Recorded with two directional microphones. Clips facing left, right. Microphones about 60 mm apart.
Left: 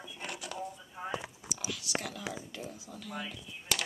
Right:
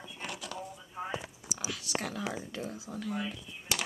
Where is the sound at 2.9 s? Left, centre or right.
Right.